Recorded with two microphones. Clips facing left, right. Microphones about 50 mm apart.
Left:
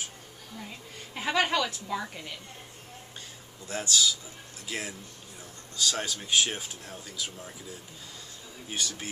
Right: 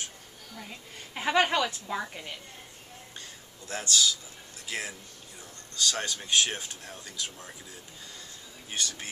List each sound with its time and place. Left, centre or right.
0.6 s a woman's voice: centre
3.6 s speech: centre
8.6 s speech: centre